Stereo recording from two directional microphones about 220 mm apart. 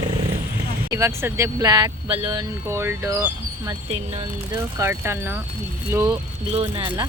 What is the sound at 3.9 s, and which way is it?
Speech, 30° right (ahead or behind).